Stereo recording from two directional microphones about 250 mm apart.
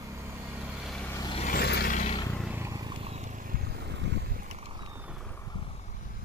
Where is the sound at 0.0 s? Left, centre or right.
Centre.